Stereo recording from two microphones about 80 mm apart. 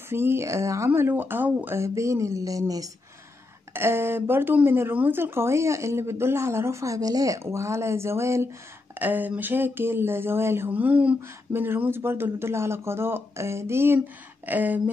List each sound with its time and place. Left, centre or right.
0.1 s speech: right
1.8 s speech: right
3.7 s speech: right
8.9 s speech: right